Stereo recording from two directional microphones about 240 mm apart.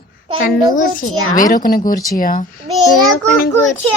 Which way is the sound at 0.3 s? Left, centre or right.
Left.